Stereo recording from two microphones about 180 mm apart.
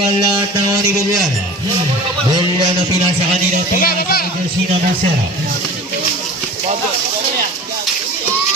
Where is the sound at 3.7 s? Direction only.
55° left (ahead or behind).